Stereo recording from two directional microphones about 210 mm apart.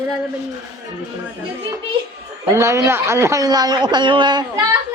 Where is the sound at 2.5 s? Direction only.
15° right (ahead or behind).